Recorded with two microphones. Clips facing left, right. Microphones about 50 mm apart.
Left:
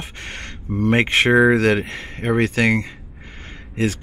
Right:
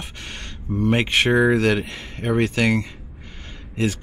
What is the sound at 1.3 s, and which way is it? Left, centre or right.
Speech, left.